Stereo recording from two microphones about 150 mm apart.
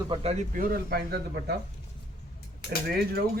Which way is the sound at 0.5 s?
75° right (ahead or behind).